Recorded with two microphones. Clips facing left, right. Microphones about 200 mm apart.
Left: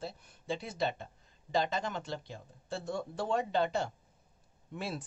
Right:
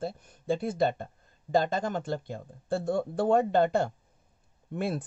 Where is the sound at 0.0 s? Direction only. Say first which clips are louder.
Right 8 dB; 50° right (ahead or behind).